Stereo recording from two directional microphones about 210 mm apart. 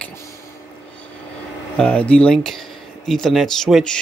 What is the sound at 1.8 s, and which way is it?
Speech, 5° left (ahead or behind).